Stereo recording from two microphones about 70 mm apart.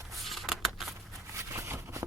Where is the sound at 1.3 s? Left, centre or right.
Right.